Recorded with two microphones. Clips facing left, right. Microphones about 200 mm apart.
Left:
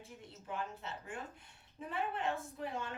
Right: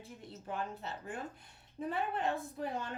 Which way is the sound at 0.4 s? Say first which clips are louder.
Right 2 dB; 40° right (ahead or behind).